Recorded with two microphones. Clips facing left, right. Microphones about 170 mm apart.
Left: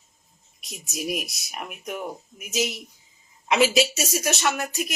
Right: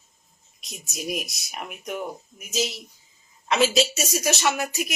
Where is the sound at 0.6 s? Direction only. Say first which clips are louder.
Left 3 dB; 5° left (ahead or behind).